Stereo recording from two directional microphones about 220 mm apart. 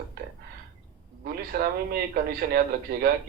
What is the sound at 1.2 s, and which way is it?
A man's voice, 40° right (ahead or behind).